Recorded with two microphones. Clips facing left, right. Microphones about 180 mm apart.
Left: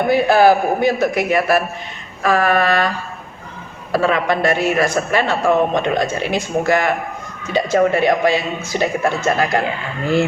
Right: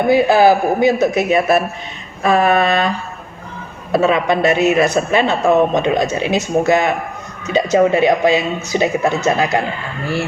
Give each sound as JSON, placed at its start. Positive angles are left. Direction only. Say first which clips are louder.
{"t": 0.1, "sound": "a man's voice", "louder": "right 1 dB", "side_deg": -20}
{"t": 3.9, "sound": "a man's voice", "louder": "right 3 dB", "side_deg": -20}